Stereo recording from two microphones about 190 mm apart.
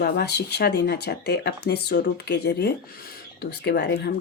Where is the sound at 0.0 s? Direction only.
60° left (ahead or behind).